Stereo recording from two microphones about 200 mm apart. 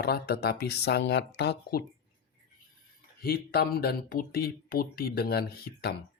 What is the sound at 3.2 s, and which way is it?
Speech, 50° left (ahead or behind).